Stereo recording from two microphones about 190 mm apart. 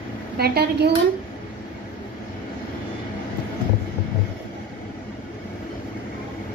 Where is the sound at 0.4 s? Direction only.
60° right (ahead or behind).